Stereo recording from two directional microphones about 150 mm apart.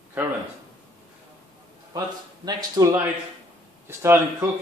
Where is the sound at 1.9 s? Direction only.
25° right (ahead or behind).